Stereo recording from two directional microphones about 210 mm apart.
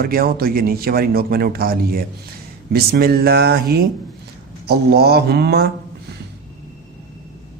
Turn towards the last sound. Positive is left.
turn(degrees=-50)  # may be behind; listen again after turning